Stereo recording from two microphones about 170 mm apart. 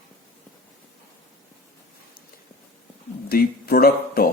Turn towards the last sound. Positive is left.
turn(degrees=60)  # may be behind; listen again after turning